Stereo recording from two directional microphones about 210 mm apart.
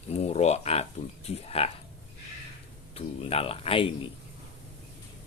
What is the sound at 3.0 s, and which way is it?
Speech, 30° left (ahead or behind).